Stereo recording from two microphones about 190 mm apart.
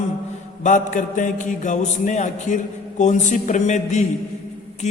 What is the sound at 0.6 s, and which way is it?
A man's voice, 40° left (ahead or behind).